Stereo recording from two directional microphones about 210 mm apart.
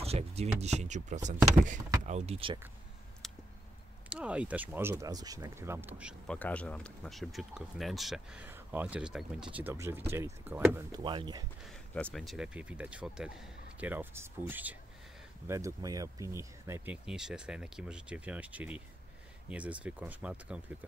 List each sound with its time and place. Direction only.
0.0 s speech: 30° right (ahead or behind)
3.2 s a sound: centre (ahead or behind)
4.1 s speech: 5° right (ahead or behind)
6.3 s speech: 5° left (ahead or behind); by 11.4 s 20° right (ahead or behind)
11.6 s speech: 5° left (ahead or behind)
19.8 s speech: 5° right (ahead or behind)